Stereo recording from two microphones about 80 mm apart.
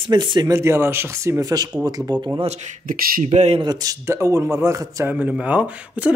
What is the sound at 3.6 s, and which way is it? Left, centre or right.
Speech, right.